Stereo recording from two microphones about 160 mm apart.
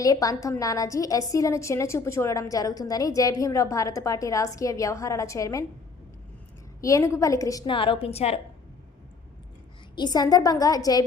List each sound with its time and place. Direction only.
0.0 s a woman's voice: 20° left (ahead or behind)
6.8 s a woman's voice: 20° left (ahead or behind); by 8.4 s 40° left (ahead or behind)
9.9 s a woman's voice: 25° left (ahead or behind)